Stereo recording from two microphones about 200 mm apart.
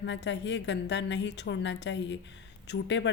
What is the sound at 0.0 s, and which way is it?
A woman's voice, 60° left (ahead or behind).